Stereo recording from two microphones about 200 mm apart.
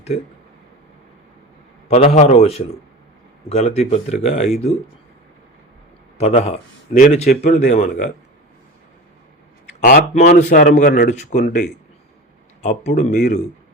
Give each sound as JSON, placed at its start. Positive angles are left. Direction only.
{"t": 1.9, "sound": "a man's voice", "side_deg": 30}
{"t": 6.1, "sound": "speech", "side_deg": 35}
{"t": 9.8, "sound": "speech", "side_deg": 45}
{"t": 12.6, "sound": "speech", "side_deg": 35}